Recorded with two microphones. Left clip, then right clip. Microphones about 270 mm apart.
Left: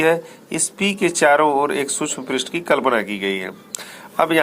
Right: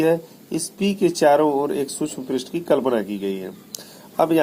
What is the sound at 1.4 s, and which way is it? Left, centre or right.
Speech, left.